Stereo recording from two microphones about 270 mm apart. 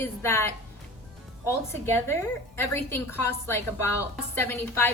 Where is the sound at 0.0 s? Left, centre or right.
Centre.